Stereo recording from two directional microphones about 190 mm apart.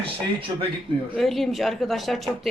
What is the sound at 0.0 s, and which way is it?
Speech, 30° right (ahead or behind).